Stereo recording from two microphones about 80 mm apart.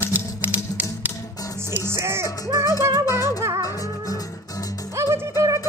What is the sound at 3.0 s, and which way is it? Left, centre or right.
Music, left.